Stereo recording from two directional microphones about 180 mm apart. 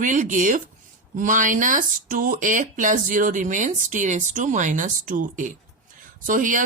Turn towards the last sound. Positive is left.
turn(degrees=-45)  # may be behind; listen again after turning